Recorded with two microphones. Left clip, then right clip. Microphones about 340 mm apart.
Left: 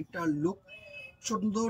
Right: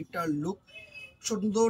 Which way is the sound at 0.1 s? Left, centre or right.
Centre.